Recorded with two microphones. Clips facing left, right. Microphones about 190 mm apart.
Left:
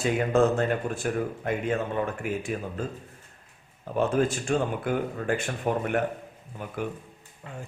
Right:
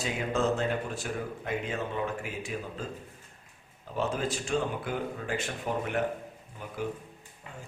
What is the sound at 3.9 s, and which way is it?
A man's voice, 55° left (ahead or behind).